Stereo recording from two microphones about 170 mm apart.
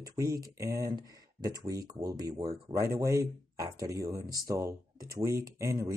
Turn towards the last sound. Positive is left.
turn(degrees=-20)  # may be behind; listen again after turning